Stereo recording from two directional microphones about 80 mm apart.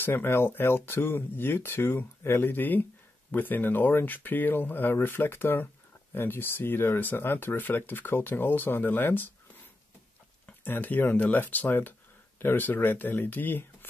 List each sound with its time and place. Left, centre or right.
0.0 s speech: left
10.4 s speech: left